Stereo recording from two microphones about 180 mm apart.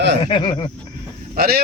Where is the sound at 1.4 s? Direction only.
60° right (ahead or behind).